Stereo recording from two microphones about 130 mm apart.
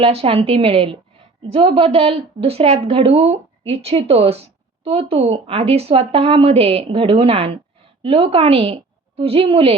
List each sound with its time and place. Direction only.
0.0 s a woman's voice: 50° right (ahead or behind)